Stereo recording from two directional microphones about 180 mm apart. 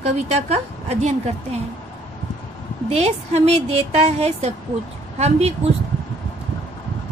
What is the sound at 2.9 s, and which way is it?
A woman's voice, 35° right (ahead or behind).